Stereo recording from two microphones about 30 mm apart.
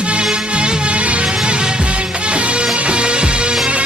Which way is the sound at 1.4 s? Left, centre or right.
Right.